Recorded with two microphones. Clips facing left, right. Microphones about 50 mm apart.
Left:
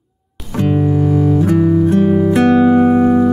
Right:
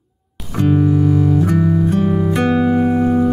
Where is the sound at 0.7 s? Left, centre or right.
Centre.